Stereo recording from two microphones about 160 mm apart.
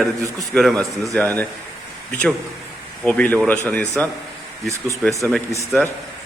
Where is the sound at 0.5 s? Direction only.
Centre (ahead or behind).